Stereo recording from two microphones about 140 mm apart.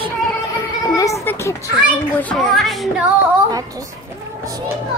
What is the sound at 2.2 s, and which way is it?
Speech, 5° left (ahead or behind).